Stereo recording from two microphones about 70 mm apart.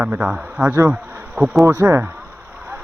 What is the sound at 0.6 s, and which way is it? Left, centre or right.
Speech, right.